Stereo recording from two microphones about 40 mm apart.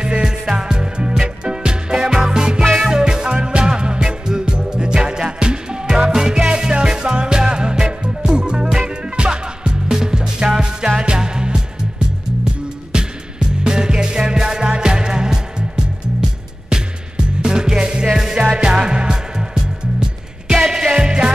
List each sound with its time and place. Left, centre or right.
0.0 s music: centre
12.9 s music: centre